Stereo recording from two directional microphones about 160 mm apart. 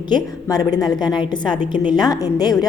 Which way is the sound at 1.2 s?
25° left (ahead or behind).